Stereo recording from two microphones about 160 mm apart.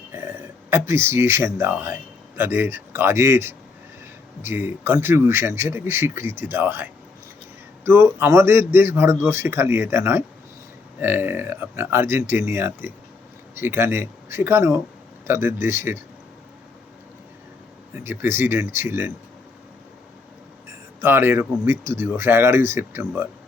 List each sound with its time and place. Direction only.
0.1 s a man's voice: 15° right (ahead or behind)
17.9 s a man's voice: 15° right (ahead or behind)
20.7 s a sound: 15° right (ahead or behind)
21.6 s a man's voice: 15° right (ahead or behind)